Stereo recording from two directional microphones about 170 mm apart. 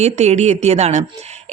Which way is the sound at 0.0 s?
40° right (ahead or behind).